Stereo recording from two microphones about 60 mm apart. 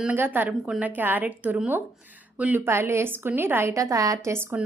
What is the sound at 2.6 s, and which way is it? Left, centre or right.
A woman's voice, right.